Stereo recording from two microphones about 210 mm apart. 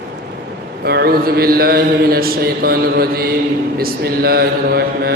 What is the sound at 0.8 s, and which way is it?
Mantra, 50° right (ahead or behind).